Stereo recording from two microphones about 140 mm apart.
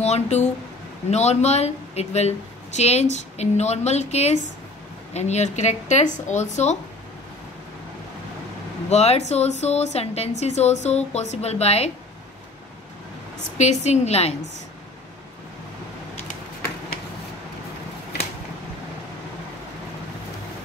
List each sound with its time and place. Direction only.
0.0 s speech: 55° left (ahead or behind)
8.9 s speech: 50° left (ahead or behind)
13.6 s speech: 55° left (ahead or behind)